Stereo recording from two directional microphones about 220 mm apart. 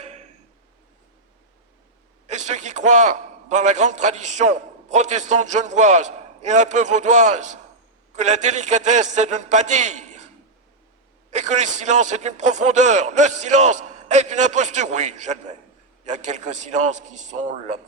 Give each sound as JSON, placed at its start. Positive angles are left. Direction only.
{"t": 2.2, "sound": "a man's voice", "side_deg": -30}
{"t": 11.3, "sound": "a man's voice", "side_deg": -30}